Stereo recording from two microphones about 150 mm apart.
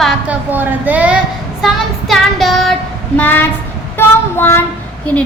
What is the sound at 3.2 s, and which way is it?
Speech, 10° left (ahead or behind).